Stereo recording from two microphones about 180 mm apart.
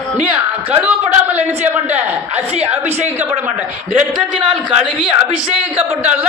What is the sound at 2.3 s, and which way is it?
Speech, 35° right (ahead or behind).